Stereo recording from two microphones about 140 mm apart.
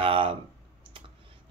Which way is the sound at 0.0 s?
40° right (ahead or behind).